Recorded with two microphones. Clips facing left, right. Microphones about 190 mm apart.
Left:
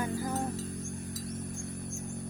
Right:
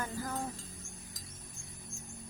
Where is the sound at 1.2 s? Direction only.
65° left (ahead or behind).